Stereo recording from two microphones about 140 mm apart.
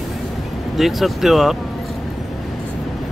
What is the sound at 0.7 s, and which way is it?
Speech, centre (ahead or behind).